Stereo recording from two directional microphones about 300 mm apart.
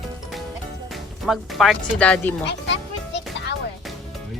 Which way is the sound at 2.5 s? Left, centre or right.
Left.